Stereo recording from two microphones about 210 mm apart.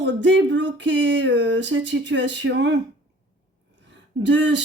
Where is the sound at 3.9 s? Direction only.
60° right (ahead or behind).